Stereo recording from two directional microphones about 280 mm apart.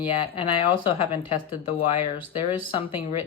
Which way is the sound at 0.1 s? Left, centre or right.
Centre.